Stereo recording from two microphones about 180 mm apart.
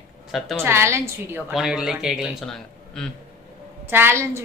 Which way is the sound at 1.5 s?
Centre (ahead or behind).